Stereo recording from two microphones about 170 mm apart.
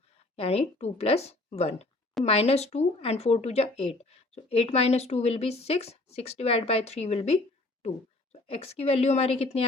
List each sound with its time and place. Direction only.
0.3 s a woman's voice: 35° left (ahead or behind)